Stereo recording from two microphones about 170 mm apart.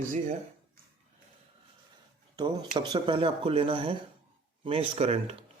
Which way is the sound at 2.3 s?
25° right (ahead or behind).